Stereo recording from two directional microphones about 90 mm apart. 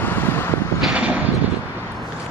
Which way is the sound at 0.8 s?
10° right (ahead or behind).